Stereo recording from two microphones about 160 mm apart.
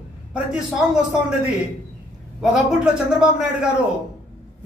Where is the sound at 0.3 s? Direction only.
5° right (ahead or behind).